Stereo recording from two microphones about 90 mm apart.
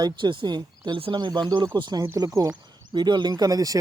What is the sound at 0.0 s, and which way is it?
Speech, 60° right (ahead or behind).